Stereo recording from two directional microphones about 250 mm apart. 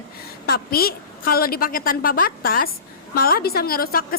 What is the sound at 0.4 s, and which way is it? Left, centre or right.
A woman's voice, left.